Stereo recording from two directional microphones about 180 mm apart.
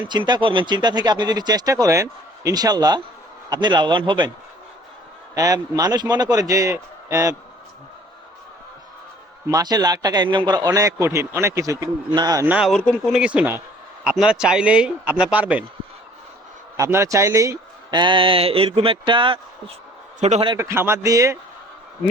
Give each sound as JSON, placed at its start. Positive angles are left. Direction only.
{"t": 0.0, "sound": "a man's voice", "side_deg": -25}
{"t": 5.3, "sound": "a man's voice", "side_deg": -20}
{"t": 9.5, "sound": "a man's voice", "side_deg": -20}
{"t": 12.5, "sound": "speech", "side_deg": 0}
{"t": 16.7, "sound": "a man's voice", "side_deg": -15}
{"t": 20.1, "sound": "a man's voice", "side_deg": -40}
{"t": 20.6, "sound": "speech", "side_deg": -15}